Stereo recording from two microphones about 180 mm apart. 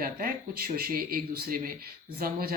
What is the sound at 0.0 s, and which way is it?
Speech, 55° right (ahead or behind).